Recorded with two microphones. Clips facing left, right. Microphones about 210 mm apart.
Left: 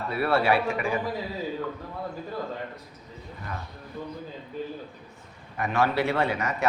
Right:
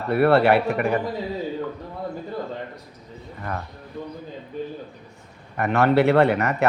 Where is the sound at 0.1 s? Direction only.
60° right (ahead or behind).